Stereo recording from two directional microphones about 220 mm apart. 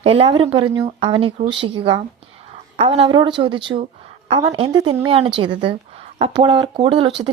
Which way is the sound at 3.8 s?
30° right (ahead or behind).